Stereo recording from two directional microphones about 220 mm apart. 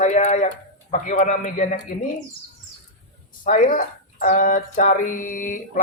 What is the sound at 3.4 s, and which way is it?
Speech, 35° left (ahead or behind).